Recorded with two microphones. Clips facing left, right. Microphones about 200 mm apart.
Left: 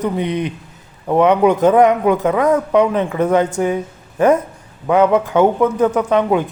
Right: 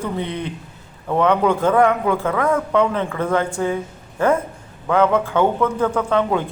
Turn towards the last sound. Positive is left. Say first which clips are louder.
# left 4 dB
turn(degrees=15)  # may be behind; listen again after turning